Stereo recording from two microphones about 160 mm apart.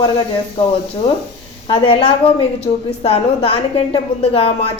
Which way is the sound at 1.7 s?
35° left (ahead or behind).